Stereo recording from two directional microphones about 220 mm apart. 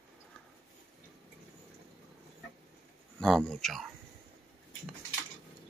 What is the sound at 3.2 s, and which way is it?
Speech, centre (ahead or behind).